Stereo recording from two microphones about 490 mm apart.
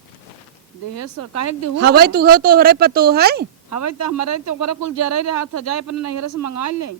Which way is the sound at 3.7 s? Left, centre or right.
Left.